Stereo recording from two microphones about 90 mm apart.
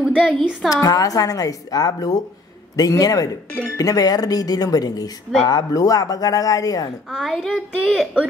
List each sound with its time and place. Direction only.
0.0 s a sound: 10° right (ahead or behind)
0.4 s a child's voice: centre (ahead or behind)
0.8 s speech: 40° left (ahead or behind)
7.1 s a child's voice: 5° right (ahead or behind)